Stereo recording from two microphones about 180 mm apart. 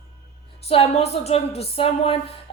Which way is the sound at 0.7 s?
35° left (ahead or behind).